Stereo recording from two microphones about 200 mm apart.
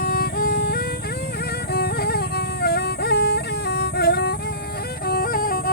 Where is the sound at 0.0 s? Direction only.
50° left (ahead or behind).